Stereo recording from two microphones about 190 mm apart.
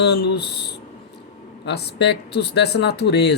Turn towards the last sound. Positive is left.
turn(degrees=60)  # may be behind; listen again after turning